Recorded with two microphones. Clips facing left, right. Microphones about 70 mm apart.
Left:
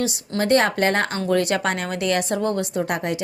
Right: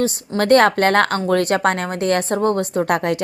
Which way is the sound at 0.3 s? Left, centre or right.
Right.